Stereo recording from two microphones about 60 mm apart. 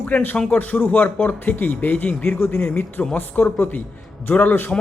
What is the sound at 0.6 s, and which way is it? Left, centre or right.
Speech, left.